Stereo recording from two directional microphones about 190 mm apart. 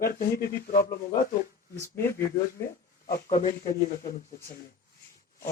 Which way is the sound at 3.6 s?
15° left (ahead or behind).